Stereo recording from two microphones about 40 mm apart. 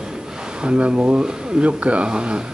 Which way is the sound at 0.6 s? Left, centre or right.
Right.